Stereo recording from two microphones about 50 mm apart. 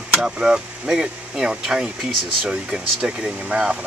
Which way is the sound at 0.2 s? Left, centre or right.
Centre.